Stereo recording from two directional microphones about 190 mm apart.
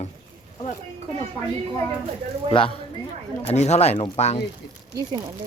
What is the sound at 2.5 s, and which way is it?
Speech, 30° left (ahead or behind).